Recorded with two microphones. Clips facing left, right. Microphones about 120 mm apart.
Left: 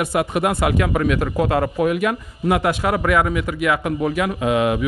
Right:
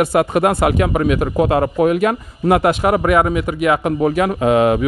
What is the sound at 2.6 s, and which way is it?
A man's voice, 30° right (ahead or behind).